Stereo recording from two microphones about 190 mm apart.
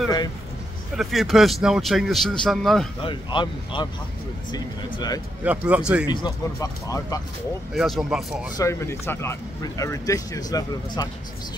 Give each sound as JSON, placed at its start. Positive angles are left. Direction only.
{"t": 0.9, "sound": "a man's voice", "side_deg": 0}
{"t": 3.0, "sound": "speech", "side_deg": 25}
{"t": 5.4, "sound": "a man's voice", "side_deg": -5}
{"t": 6.0, "sound": "speech", "side_deg": 20}
{"t": 7.7, "sound": "a man's voice", "side_deg": 0}
{"t": 8.5, "sound": "speech", "side_deg": 15}